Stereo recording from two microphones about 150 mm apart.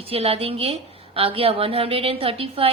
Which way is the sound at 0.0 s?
40° right (ahead or behind).